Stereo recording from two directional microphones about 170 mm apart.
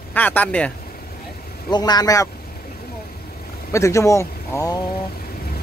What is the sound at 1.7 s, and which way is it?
Speech, 25° left (ahead or behind).